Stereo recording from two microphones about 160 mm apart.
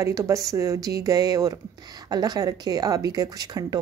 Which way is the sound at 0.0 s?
20° right (ahead or behind).